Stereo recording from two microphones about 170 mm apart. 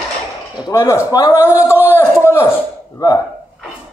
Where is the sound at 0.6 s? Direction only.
20° left (ahead or behind).